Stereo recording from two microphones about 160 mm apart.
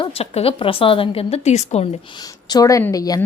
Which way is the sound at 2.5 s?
20° left (ahead or behind).